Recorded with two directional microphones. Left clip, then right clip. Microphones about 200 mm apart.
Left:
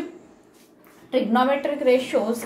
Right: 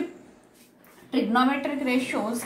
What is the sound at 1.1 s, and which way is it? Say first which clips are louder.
Speech: left 3 dB; 35° left (ahead or behind).